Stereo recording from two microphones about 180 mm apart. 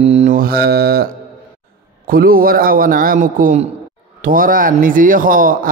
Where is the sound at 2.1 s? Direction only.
55° right (ahead or behind).